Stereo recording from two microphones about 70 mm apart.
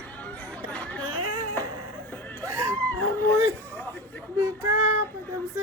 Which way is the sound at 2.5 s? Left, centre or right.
Right.